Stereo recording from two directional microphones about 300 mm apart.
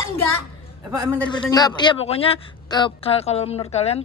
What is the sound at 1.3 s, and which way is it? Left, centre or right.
A man's voice, centre.